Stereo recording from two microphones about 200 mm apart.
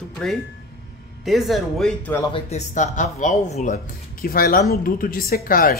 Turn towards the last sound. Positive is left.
turn(degrees=45)  # may be behind; listen again after turning